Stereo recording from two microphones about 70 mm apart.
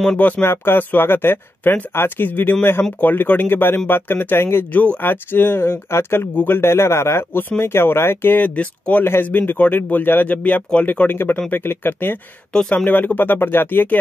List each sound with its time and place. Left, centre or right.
0.2 s speech: left
12.5 s speech: centre
12.8 s speech: left